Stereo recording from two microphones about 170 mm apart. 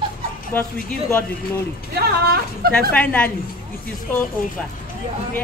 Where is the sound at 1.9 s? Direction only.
65° right (ahead or behind).